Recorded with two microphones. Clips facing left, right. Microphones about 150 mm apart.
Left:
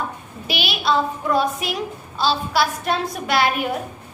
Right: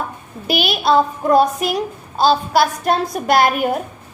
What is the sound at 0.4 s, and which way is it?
A woman's voice, 45° right (ahead or behind).